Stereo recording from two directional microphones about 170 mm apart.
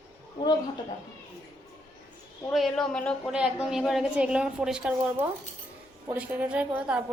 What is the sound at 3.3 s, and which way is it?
A woman's voice, 5° right (ahead or behind).